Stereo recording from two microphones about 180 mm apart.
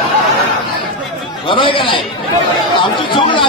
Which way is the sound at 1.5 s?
30° left (ahead or behind).